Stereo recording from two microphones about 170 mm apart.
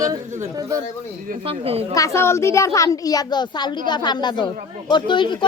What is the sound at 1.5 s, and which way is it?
Speech, 35° right (ahead or behind).